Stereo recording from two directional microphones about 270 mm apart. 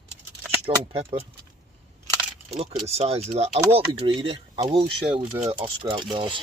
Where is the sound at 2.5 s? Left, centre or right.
Right.